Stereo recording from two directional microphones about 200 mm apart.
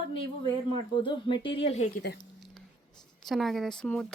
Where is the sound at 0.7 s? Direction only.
25° left (ahead or behind).